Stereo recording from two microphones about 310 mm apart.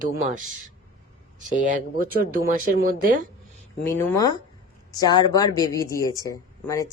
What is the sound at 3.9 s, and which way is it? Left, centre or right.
Speech, centre.